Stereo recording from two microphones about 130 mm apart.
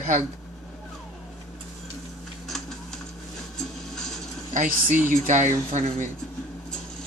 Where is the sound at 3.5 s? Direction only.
5° left (ahead or behind).